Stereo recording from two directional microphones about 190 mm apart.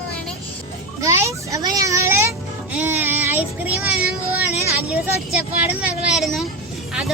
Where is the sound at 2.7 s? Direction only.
10° right (ahead or behind).